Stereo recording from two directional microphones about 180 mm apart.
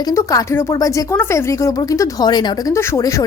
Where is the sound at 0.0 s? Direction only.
20° left (ahead or behind).